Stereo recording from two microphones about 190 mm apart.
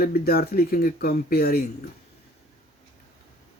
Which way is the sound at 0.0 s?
55° left (ahead or behind).